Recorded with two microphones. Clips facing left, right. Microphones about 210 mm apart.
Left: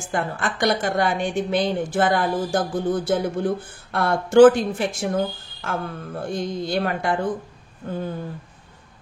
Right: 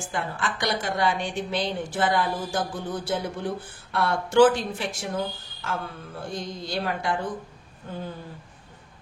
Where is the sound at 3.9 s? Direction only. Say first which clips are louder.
Left 5 dB; 50° left (ahead or behind).